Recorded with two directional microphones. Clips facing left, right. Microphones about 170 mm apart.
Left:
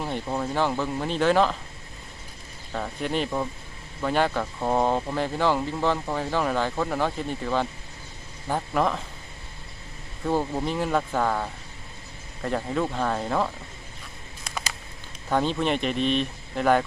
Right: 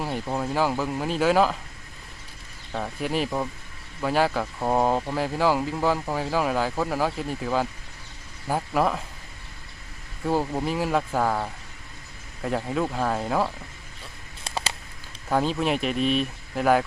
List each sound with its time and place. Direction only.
0.0 s speech: 5° right (ahead or behind)
2.7 s speech: 5° right (ahead or behind)
10.2 s speech: 5° right (ahead or behind)
14.4 s a sound: 30° right (ahead or behind)
15.3 s speech: 5° right (ahead or behind)